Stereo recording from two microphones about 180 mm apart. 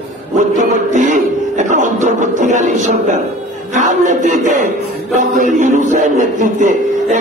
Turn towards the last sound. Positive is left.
turn(degrees=-45)  # may be behind; listen again after turning